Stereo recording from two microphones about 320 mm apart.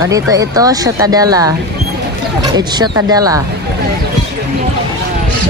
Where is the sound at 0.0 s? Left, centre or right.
Centre.